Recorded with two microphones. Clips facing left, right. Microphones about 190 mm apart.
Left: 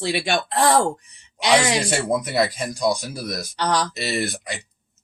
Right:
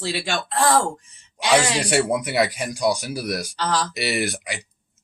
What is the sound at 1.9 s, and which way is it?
Speech, 10° right (ahead or behind).